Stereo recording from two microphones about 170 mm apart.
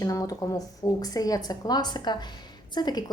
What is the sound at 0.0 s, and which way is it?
Speech, 20° left (ahead or behind).